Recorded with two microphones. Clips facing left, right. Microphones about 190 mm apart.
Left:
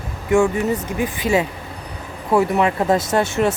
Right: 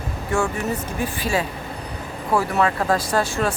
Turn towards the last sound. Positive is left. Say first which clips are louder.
# left 4 dB
turn(degrees=20)  # may be behind; listen again after turning